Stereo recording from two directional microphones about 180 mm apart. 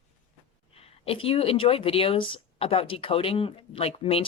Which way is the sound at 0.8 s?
30° left (ahead or behind).